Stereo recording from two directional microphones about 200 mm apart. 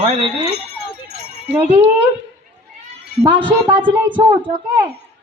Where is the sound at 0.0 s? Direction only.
30° right (ahead or behind).